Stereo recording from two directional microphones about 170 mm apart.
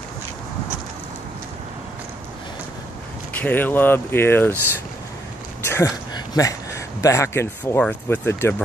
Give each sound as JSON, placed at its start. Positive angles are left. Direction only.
{"t": 3.3, "sound": "speech", "side_deg": 10}
{"t": 5.7, "sound": "speech", "side_deg": 15}